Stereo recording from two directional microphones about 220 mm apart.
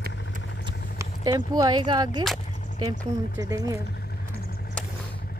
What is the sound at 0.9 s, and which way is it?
Speech, 20° right (ahead or behind).